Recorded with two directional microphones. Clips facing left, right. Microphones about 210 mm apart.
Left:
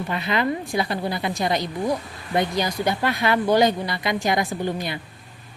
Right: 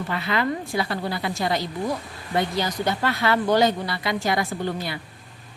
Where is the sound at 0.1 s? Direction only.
20° left (ahead or behind).